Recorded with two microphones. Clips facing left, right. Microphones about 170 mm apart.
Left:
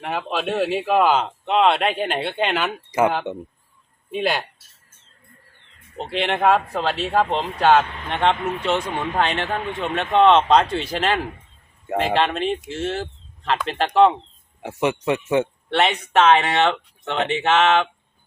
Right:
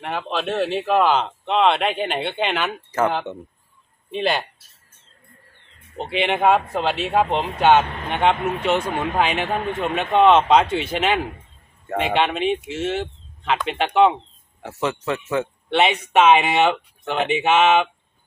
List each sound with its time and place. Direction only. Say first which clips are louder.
0.0 s speech: even; 5° left (ahead or behind)
6.0 s speech: right 1 dB; centre (ahead or behind)
14.6 s speech: left 3 dB; 15° left (ahead or behind)
15.7 s speech: right 1 dB; 5° right (ahead or behind)